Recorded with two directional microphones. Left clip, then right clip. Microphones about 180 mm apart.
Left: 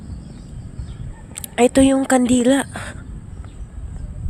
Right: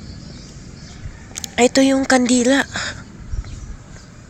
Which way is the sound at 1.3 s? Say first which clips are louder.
Even; 20° left (ahead or behind).